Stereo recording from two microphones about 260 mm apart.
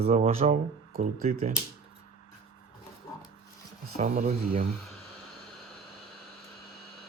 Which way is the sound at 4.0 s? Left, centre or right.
Right.